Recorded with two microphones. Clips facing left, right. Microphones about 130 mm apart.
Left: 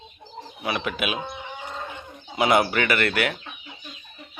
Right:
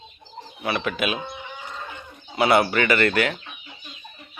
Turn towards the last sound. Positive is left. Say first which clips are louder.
# right 3 dB
turn(degrees=5)  # may be behind; listen again after turning